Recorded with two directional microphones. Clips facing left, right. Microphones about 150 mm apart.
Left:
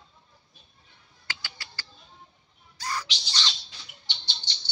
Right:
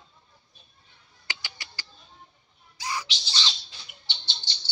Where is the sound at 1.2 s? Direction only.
15° right (ahead or behind).